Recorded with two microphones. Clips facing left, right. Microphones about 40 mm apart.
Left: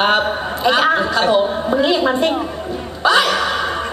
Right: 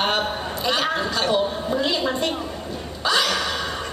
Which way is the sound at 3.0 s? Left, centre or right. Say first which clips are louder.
Left 7 dB; left.